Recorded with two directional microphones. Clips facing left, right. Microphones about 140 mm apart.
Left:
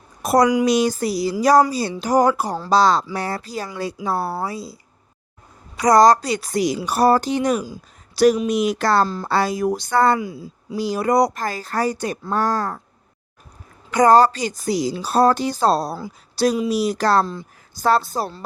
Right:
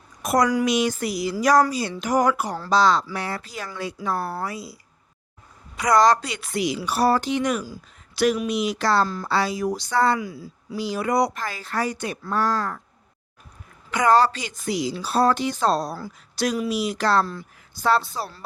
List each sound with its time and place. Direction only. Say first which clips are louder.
0.2 s a woman's voice: left 4 dB; 35° left (ahead or behind)
5.7 s a woman's voice: left 5 dB; 40° left (ahead or behind)
9.0 s speech: left 3 dB; 30° left (ahead or behind)
9.3 s speech: left 4 dB; 50° left (ahead or behind)
10.2 s speech: left 3 dB; 25° left (ahead or behind)
10.8 s a woman's voice: left 4 dB; 40° left (ahead or behind)
13.9 s a woman's voice: left 5 dB; 40° left (ahead or behind)